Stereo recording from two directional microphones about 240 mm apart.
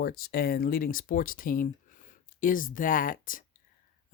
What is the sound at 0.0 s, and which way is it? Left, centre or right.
Speech, left.